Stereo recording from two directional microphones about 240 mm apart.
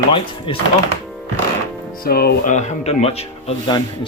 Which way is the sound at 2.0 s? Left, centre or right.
Left.